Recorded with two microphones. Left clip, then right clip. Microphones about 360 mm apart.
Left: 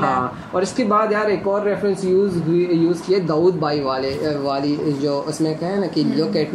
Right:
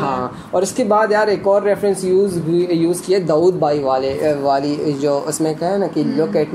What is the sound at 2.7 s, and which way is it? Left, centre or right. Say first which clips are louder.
Speech: right 2 dB; right.